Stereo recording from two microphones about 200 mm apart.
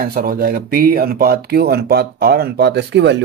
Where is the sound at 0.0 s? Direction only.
50° right (ahead or behind).